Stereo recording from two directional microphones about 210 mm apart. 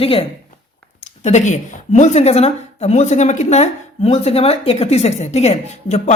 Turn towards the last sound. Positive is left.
turn(degrees=30)  # may be behind; listen again after turning